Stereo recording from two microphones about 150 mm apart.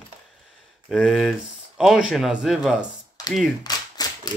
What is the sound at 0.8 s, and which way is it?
Speech, centre (ahead or behind).